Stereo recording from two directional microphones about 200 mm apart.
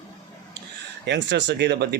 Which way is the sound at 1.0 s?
60° right (ahead or behind).